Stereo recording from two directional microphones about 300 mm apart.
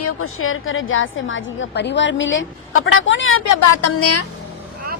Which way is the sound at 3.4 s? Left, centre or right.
Left.